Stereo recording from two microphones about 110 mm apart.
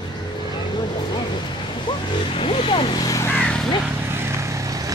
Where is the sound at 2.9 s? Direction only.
30° left (ahead or behind).